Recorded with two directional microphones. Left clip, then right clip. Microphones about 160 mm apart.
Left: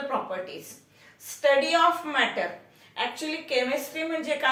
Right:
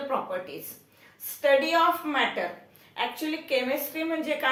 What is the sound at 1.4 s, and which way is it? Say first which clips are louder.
A woman's voice: left 1 dB; 25° right (ahead or behind).